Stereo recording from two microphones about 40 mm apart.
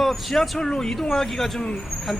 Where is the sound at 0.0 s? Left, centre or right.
Centre.